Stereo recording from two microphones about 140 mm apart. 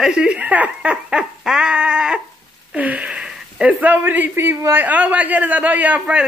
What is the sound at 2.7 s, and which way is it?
Speech, 10° right (ahead or behind).